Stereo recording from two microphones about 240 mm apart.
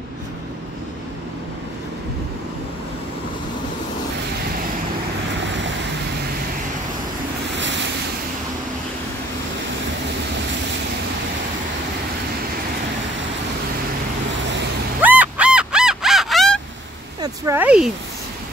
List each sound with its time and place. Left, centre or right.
5.4 s vehicle: right
15.0 s crow: centre
17.2 s a sound: centre